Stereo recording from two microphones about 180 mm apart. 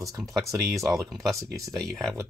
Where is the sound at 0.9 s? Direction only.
Centre (ahead or behind).